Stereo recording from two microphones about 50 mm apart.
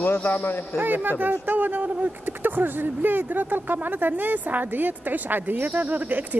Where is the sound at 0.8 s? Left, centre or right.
Right.